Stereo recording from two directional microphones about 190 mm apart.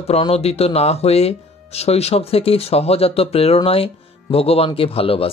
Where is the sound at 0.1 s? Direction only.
30° left (ahead or behind).